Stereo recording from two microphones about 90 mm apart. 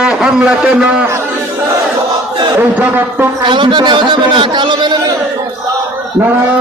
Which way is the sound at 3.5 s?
60° right (ahead or behind).